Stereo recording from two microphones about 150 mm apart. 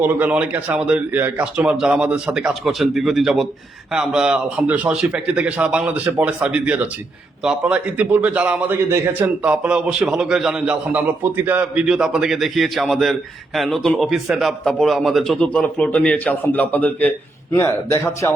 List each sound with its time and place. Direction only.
0.2 s a man's voice: 10° right (ahead or behind); by 18.3 s 20° left (ahead or behind)